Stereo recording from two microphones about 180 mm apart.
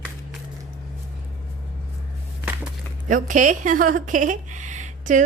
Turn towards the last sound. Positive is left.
turn(degrees=-45)  # may be behind; listen again after turning